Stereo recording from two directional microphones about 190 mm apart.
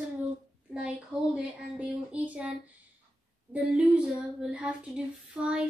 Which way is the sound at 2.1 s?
5° right (ahead or behind).